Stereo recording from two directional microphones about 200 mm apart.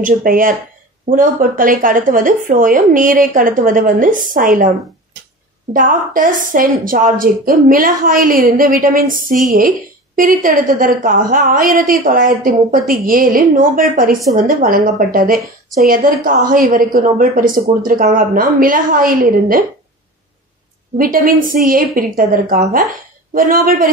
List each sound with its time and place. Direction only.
0.0 s a woman's voice: 45° right (ahead or behind)
21.0 s a woman's voice: 45° right (ahead or behind)